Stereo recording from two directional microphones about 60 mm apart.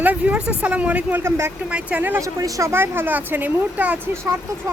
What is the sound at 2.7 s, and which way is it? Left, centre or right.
Speech, right.